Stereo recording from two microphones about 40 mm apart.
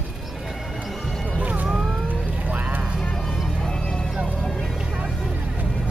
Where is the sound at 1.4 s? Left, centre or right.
Right.